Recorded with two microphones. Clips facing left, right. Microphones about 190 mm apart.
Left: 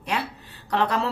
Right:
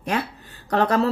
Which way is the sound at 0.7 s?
45° right (ahead or behind).